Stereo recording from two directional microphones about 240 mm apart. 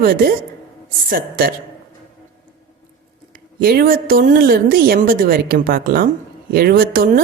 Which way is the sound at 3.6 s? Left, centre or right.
Right.